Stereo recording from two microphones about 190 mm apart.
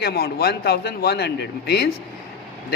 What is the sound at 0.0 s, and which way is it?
A man's voice, 55° left (ahead or behind).